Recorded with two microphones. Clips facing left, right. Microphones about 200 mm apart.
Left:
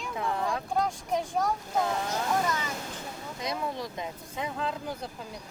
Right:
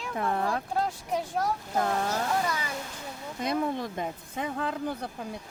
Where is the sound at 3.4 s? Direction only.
55° right (ahead or behind).